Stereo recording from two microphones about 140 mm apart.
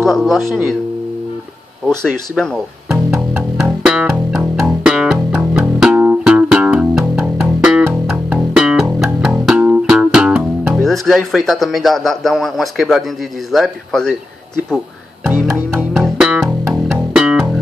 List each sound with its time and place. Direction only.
0.0 s speech: centre (ahead or behind)
2.3 s speech: 5° left (ahead or behind)
3.6 s music: 5° right (ahead or behind)
13.5 s speech: centre (ahead or behind)
15.2 s music: 15° right (ahead or behind)
15.9 s music: 5° right (ahead or behind)